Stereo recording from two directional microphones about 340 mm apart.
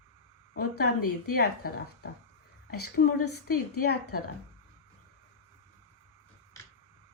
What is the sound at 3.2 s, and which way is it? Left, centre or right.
Speech, left.